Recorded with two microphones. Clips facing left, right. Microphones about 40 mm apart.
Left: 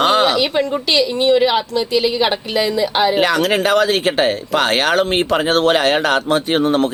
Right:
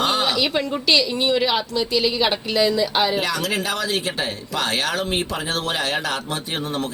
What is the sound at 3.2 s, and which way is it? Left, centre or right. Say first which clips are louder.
Speech: left 8 dB; left.